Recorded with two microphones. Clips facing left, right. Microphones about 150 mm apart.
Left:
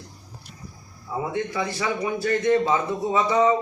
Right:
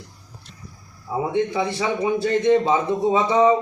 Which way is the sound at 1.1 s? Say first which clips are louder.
Right 5 dB; 20° right (ahead or behind).